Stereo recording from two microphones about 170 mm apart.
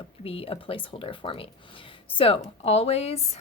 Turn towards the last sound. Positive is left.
turn(degrees=40)  # may be behind; listen again after turning